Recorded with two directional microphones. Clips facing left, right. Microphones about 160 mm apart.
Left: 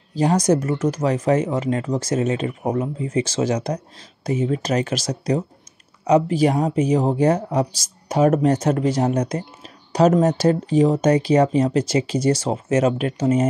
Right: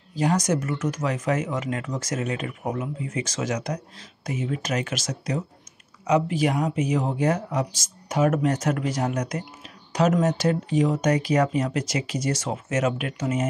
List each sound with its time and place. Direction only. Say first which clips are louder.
0.1 s speech: left 5 dB; 30° left (ahead or behind)